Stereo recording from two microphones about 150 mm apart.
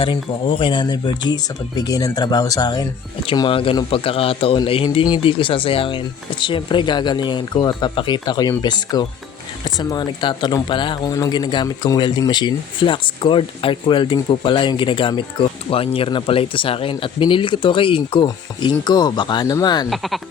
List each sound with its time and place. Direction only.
0.0 s speech: 35° left (ahead or behind)